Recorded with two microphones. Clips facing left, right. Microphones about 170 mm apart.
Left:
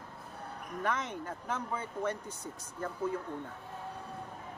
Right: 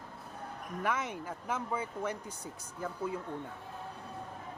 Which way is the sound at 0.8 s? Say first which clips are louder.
Even; 10° right (ahead or behind).